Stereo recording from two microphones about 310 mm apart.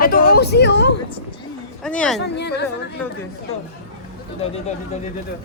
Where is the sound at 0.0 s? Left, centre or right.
Left.